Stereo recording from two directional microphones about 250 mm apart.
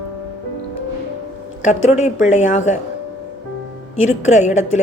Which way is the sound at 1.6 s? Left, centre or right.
Left.